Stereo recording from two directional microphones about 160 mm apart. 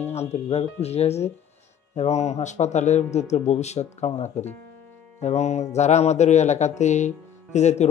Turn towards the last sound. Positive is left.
turn(degrees=45)  # may be behind; listen again after turning